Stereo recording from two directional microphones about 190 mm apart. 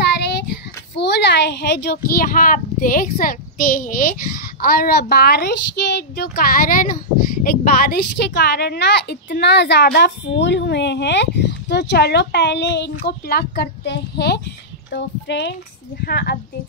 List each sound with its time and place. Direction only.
0.0 s child singing: 60° left (ahead or behind)
0.9 s a woman's voice: 65° left (ahead or behind)
16.0 s a woman's voice: 55° left (ahead or behind)